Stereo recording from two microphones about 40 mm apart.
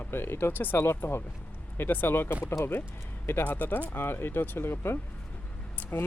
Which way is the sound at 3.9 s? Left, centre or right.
Left.